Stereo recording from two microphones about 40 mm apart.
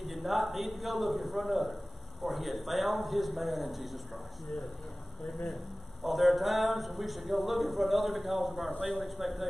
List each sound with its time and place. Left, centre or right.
0.0 s speech: centre
6.0 s speech: centre